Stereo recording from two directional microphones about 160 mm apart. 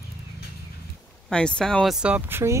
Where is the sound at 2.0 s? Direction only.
10° right (ahead or behind).